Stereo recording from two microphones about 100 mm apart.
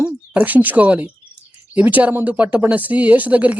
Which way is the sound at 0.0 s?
15° right (ahead or behind).